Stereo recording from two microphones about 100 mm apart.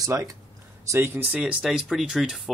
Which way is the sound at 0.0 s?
30° right (ahead or behind).